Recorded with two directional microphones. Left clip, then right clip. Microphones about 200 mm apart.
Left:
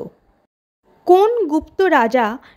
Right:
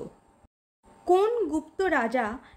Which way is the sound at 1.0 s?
35° left (ahead or behind).